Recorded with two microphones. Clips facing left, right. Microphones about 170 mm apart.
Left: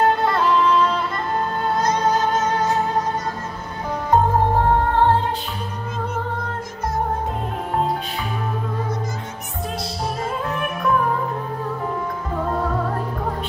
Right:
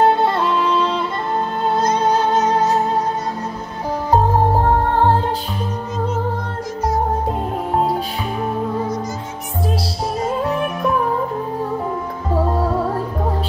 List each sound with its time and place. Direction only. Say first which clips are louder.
0.0 s music: right 3 dB; 30° right (ahead or behind)